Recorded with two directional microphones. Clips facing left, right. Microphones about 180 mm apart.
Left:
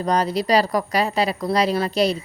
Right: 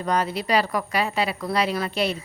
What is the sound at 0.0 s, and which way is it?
A woman's voice, 35° left (ahead or behind).